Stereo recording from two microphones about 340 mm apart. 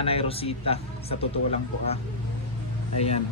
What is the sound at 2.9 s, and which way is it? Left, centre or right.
Speech, centre.